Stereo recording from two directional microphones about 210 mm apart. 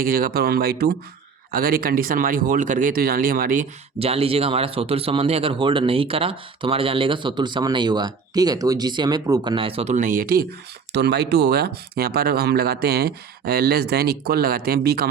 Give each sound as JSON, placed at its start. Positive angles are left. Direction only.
{"t": 0.0, "sound": "speech", "side_deg": -45}
{"t": 3.9, "sound": "speech", "side_deg": -30}